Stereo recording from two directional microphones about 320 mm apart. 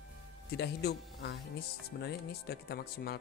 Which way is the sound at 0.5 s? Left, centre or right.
Left.